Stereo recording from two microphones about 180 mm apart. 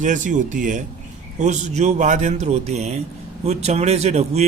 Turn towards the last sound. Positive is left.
turn(degrees=-35)  # may be behind; listen again after turning